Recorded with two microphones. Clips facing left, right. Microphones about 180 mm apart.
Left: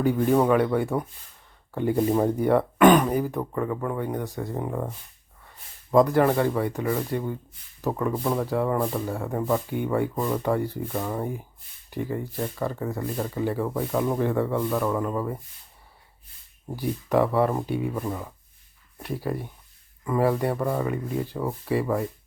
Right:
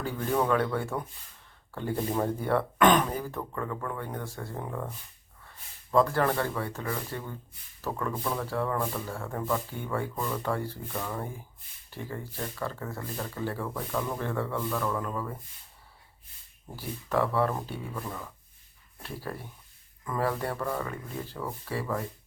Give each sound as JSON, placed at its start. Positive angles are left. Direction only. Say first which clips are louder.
{"t": 0.0, "sound": "speech", "louder": "left 8 dB", "side_deg": 15}
{"t": 5.9, "sound": "speech", "louder": "left 6 dB", "side_deg": 15}
{"t": 14.2, "sound": "speech", "louder": "left 7 dB", "side_deg": 15}
{"t": 16.7, "sound": "speech", "louder": "left 7 dB", "side_deg": 15}